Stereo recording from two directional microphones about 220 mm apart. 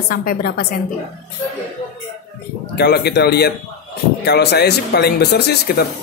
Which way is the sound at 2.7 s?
50° left (ahead or behind).